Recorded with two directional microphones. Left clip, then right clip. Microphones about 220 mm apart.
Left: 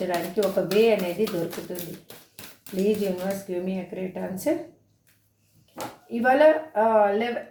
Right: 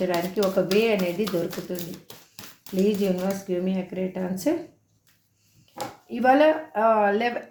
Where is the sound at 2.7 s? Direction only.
25° right (ahead or behind).